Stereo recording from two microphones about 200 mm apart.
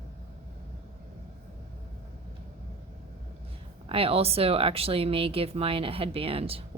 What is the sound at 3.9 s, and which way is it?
Speech, 30° right (ahead or behind).